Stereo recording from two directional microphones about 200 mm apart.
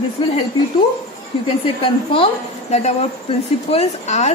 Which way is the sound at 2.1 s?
30° left (ahead or behind).